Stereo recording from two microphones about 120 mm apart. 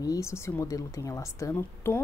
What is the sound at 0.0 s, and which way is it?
Speech, 25° left (ahead or behind).